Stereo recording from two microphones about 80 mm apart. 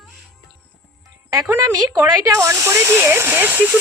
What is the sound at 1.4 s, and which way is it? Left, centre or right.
A woman's voice, right.